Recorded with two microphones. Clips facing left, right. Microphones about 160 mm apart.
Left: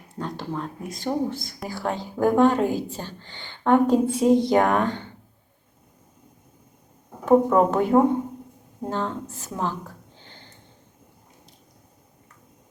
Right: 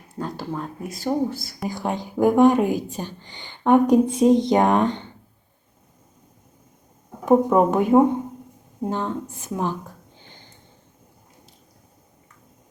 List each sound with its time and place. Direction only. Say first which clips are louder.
0.2 s speech: right 1 dB; 5° right (ahead or behind)
1.6 s speech: right 2 dB; 15° right (ahead or behind)
7.3 s speech: right 1 dB; 15° right (ahead or behind)
10.2 s sniff: even; 15° right (ahead or behind)